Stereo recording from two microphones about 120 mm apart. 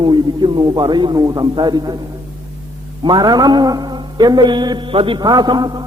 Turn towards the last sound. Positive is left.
turn(degrees=-35)  # may be behind; listen again after turning